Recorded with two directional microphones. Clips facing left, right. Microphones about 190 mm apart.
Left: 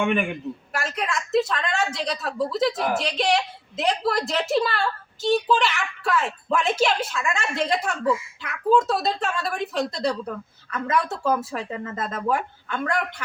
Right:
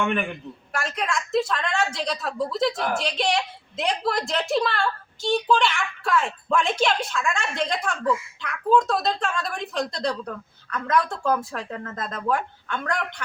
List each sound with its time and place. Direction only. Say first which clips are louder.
0.0 s speech: left 2 dB; 5° left (ahead or behind)